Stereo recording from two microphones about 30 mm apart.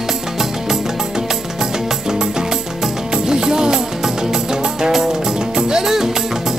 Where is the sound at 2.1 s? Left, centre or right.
Right.